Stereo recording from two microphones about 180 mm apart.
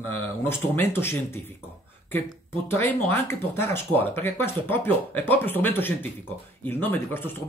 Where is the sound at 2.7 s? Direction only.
10° left (ahead or behind).